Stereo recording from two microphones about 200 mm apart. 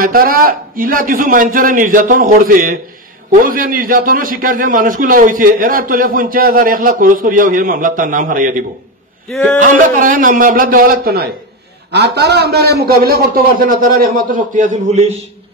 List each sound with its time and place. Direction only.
0.0 s a man's voice: 45° right (ahead or behind)
9.3 s speech: centre (ahead or behind)
9.6 s a man's voice: 40° right (ahead or behind)